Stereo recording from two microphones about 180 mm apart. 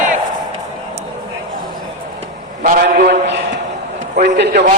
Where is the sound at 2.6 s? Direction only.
50° right (ahead or behind).